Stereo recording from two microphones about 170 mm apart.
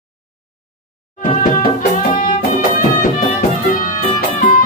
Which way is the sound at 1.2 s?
50° left (ahead or behind).